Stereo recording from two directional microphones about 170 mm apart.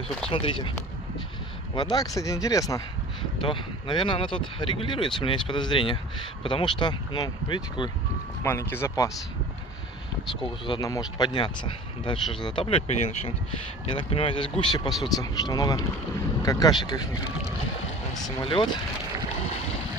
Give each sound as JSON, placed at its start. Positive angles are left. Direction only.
{"t": 0.3, "sound": "speech", "side_deg": 30}
{"t": 1.8, "sound": "speech", "side_deg": 20}
{"t": 8.5, "sound": "speech", "side_deg": 15}
{"t": 10.7, "sound": "speech", "side_deg": 20}
{"t": 18.2, "sound": "speech", "side_deg": 30}